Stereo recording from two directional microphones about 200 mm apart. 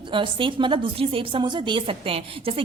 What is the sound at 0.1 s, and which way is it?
A woman's voice, 25° right (ahead or behind).